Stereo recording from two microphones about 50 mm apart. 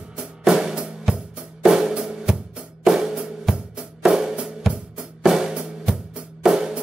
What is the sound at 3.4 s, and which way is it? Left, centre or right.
Music, centre.